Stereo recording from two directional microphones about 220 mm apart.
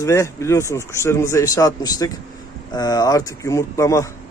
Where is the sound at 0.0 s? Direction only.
15° left (ahead or behind).